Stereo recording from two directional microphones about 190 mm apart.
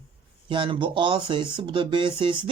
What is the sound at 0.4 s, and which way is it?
Speech, 25° right (ahead or behind).